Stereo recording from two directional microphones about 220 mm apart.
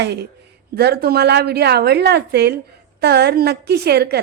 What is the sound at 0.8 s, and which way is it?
A woman's voice, 45° right (ahead or behind).